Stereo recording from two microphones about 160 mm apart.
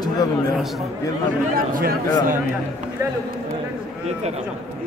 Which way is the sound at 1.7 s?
60° right (ahead or behind).